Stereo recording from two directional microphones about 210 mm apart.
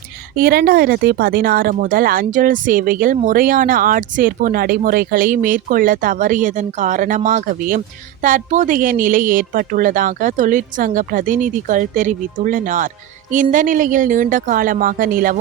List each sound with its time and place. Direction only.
0.3 s speech: 45° right (ahead or behind)